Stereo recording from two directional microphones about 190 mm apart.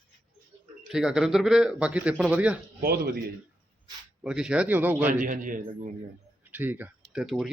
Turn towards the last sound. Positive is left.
turn(degrees=0)  # may be behind; listen again after turning